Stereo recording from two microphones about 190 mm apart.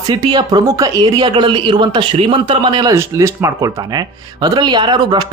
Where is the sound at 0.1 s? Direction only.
20° right (ahead or behind).